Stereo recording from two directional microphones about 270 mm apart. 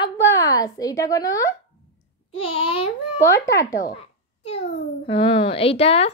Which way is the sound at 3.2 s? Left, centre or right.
Centre.